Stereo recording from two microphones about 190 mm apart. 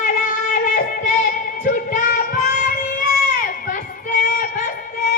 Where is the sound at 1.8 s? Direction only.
40° left (ahead or behind).